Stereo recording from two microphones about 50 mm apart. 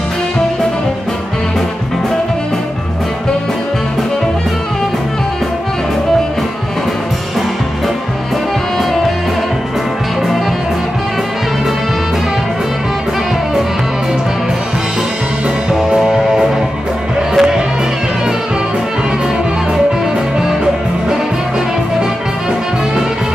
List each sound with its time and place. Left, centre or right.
15.7 s music: centre